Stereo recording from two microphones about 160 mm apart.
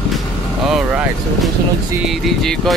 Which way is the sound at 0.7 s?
Centre (ahead or behind).